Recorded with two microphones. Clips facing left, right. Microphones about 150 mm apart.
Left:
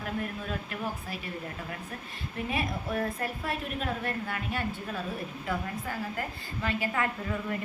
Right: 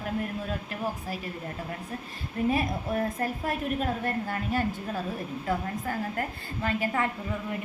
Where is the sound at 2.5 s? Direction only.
40° right (ahead or behind).